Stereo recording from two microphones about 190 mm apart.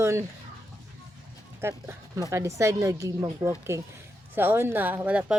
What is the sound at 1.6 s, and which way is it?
Speech, 15° right (ahead or behind).